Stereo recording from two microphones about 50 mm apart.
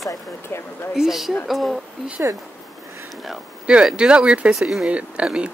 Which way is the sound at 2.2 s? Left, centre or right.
Right.